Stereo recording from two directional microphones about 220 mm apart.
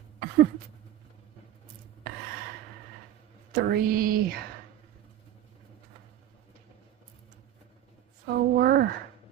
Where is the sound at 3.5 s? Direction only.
40° right (ahead or behind).